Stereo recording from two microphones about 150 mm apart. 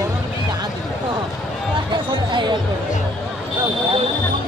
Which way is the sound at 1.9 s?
30° right (ahead or behind).